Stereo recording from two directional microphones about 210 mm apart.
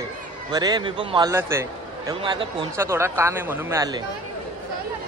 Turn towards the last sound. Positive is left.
turn(degrees=-15)  # may be behind; listen again after turning